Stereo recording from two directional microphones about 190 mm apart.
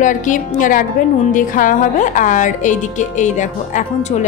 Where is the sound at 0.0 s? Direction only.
40° left (ahead or behind).